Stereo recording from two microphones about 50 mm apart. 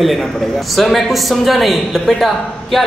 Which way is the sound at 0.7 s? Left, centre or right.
Centre.